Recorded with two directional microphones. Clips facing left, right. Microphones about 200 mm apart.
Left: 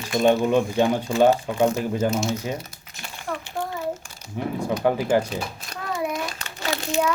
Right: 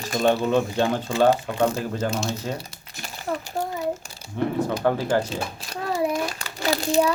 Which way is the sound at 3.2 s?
40° right (ahead or behind).